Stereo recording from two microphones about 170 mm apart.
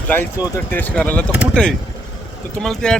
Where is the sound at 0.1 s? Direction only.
15° left (ahead or behind).